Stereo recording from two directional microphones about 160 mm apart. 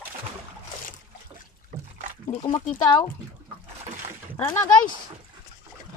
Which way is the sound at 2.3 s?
35° left (ahead or behind).